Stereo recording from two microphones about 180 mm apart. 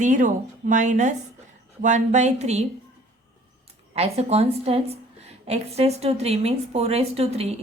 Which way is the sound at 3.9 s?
35° right (ahead or behind).